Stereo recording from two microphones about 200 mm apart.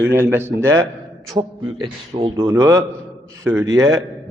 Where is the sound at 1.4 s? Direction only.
25° right (ahead or behind).